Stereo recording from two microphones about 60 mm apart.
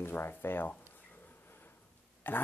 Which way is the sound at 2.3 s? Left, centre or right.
Left.